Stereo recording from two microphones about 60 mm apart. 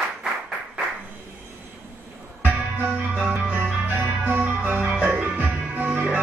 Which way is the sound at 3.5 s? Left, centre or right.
Right.